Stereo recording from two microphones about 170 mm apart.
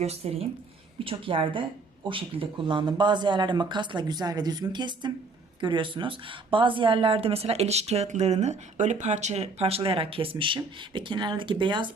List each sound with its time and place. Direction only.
0.0 s speech: 35° right (ahead or behind)